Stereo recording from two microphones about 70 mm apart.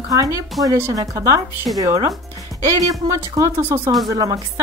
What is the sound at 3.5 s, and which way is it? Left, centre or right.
Speech, right.